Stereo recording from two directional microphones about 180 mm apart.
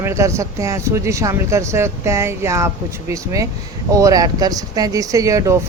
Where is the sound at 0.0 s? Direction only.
15° right (ahead or behind).